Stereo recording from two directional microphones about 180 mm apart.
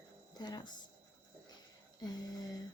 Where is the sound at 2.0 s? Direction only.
20° left (ahead or behind).